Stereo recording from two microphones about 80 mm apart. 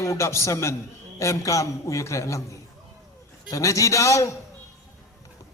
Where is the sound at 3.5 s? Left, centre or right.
Left.